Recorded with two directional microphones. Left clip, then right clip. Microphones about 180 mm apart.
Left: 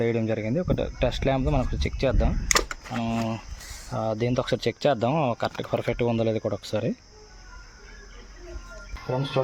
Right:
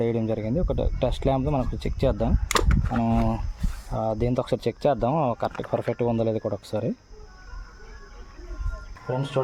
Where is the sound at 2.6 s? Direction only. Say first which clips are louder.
Right 4 dB; 40° right (ahead or behind).